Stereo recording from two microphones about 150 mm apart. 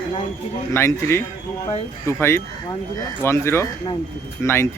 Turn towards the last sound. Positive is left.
turn(degrees=15)  # may be behind; listen again after turning